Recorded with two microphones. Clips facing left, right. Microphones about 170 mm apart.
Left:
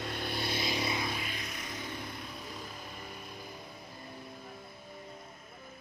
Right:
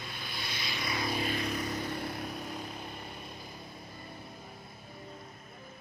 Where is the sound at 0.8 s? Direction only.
25° left (ahead or behind).